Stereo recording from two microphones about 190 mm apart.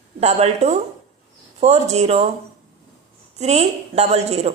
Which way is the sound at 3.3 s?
35° right (ahead or behind).